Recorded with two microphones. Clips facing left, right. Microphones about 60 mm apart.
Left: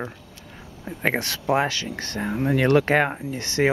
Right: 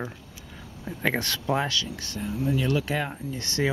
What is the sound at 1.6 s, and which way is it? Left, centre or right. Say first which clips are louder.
Speech: left 4 dB; left.